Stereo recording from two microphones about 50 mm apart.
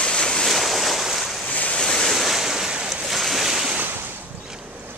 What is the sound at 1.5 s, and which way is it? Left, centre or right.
Waves, left.